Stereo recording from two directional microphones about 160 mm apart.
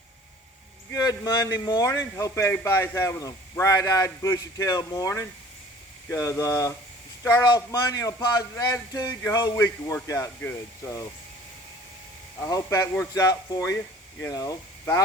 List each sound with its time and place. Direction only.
0.9 s a man's voice: 20° left (ahead or behind)
12.4 s a man's voice: 20° left (ahead or behind)